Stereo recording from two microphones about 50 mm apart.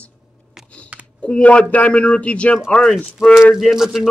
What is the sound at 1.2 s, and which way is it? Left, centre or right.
A man's voice, left.